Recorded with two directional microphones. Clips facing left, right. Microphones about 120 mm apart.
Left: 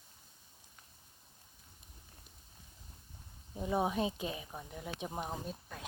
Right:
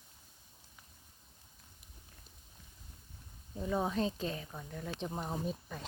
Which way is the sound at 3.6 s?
15° left (ahead or behind).